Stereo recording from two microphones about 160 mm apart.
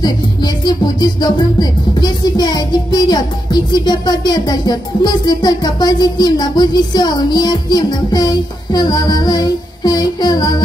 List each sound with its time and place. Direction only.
1.0 s music: 25° left (ahead or behind)